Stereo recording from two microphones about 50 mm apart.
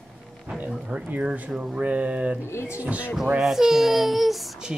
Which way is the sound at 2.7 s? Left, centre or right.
Right.